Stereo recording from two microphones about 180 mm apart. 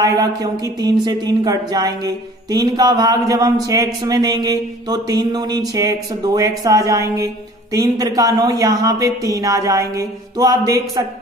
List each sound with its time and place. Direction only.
0.0 s speech: 20° right (ahead or behind)